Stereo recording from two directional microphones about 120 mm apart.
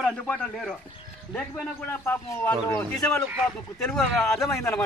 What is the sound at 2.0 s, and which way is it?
Speech, 20° left (ahead or behind).